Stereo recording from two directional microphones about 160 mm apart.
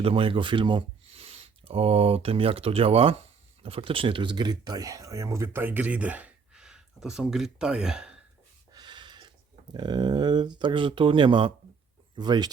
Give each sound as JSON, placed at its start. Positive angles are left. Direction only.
{"t": 0.0, "sound": "speech", "side_deg": -35}
{"t": 8.7, "sound": "a sound", "side_deg": -30}
{"t": 9.7, "sound": "speech", "side_deg": -25}